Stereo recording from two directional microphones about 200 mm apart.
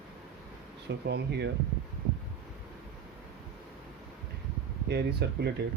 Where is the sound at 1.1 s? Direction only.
55° right (ahead or behind).